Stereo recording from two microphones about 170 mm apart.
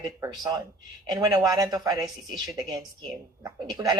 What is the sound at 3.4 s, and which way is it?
Speech, 25° right (ahead or behind).